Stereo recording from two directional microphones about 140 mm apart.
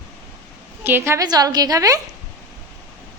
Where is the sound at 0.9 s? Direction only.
15° right (ahead or behind).